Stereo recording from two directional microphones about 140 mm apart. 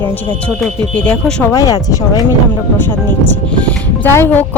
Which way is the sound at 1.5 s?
25° left (ahead or behind).